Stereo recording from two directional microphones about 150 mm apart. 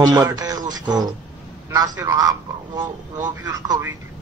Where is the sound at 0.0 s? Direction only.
25° right (ahead or behind).